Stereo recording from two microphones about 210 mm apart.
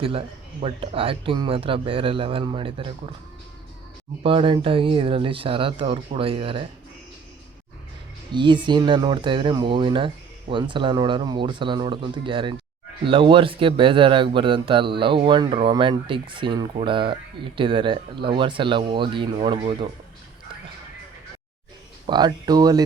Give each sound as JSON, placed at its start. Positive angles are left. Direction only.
{"t": 0.0, "sound": "speech", "side_deg": -25}
{"t": 4.2, "sound": "speech", "side_deg": -25}
{"t": 8.3, "sound": "speech", "side_deg": -20}
{"t": 22.0, "sound": "speech", "side_deg": -20}